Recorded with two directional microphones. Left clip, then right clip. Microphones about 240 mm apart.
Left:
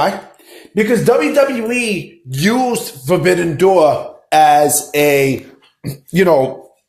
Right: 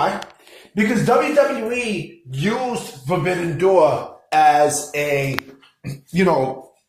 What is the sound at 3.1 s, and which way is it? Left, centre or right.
Speech, left.